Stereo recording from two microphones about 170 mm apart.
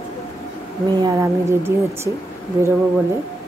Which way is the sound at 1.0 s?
15° right (ahead or behind).